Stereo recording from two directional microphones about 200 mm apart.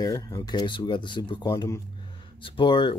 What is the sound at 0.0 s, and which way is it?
Speech, 20° left (ahead or behind).